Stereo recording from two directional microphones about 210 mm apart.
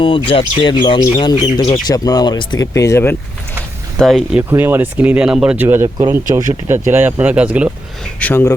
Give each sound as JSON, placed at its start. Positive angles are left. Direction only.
{"t": 0.0, "sound": "speech", "side_deg": 25}
{"t": 3.9, "sound": "speech", "side_deg": -5}
{"t": 8.2, "sound": "speech", "side_deg": 10}